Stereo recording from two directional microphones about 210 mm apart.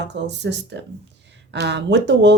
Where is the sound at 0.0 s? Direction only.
55° right (ahead or behind).